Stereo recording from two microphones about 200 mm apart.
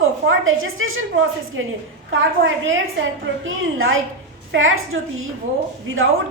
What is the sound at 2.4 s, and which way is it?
A woman's voice, 65° right (ahead or behind).